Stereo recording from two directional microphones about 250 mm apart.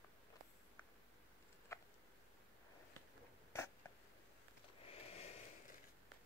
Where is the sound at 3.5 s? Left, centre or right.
Centre.